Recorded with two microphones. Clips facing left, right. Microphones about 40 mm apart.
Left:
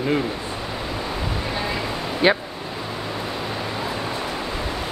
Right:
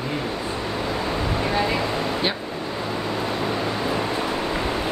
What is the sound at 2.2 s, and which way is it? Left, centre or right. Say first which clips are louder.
Speech: left 12 dB; centre.